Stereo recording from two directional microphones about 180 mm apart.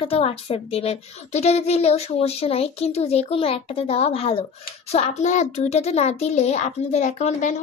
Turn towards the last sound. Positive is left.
turn(degrees=40)  # may be behind; listen again after turning